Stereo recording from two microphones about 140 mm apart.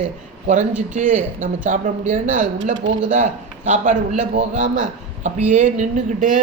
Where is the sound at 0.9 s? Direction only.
65° right (ahead or behind).